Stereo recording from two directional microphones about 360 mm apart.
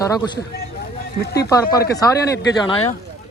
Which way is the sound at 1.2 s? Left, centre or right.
Left.